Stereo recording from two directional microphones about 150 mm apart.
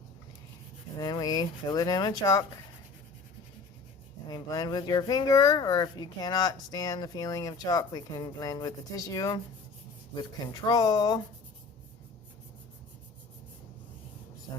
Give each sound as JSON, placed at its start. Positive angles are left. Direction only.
{"t": 0.9, "sound": "speech", "side_deg": 25}
{"t": 4.3, "sound": "speech", "side_deg": 25}